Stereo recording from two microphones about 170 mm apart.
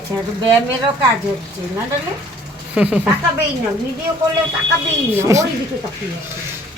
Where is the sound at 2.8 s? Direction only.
5° right (ahead or behind).